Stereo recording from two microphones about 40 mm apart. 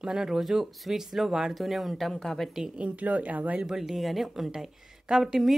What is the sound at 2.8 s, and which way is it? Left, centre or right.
Speech, right.